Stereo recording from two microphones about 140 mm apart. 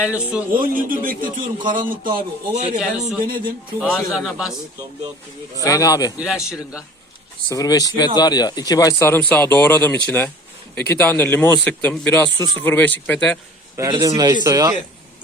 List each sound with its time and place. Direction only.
0.0 s a man's voice: 10° right (ahead or behind)
0.5 s a man's voice: 75° right (ahead or behind)
2.6 s speech: 55° right (ahead or behind)
3.2 s a man's voice: 90° right
3.8 s a man's voice: 5° right (ahead or behind)
5.6 s speech: 25° left (ahead or behind)
6.1 s a man's voice: 5° right (ahead or behind)
7.5 s speech: 25° left (ahead or behind); by 13.4 s 10° left (ahead or behind)
13.9 s speech: 30° right (ahead or behind)